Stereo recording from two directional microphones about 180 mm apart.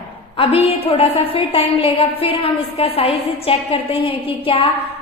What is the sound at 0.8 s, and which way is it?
A woman's voice, 30° left (ahead or behind).